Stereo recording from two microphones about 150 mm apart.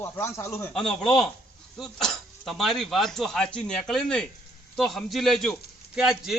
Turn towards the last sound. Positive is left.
turn(degrees=-5)  # may be behind; listen again after turning